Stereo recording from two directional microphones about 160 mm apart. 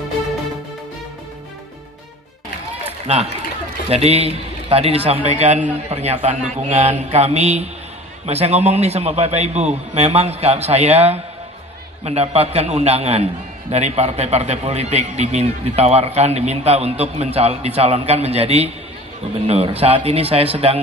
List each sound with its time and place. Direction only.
3.9 s a man's voice: 40° right (ahead or behind)